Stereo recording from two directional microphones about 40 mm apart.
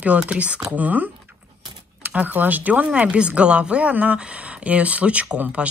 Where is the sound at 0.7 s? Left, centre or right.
Right.